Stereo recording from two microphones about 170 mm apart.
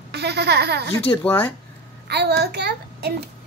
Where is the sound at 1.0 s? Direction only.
10° left (ahead or behind).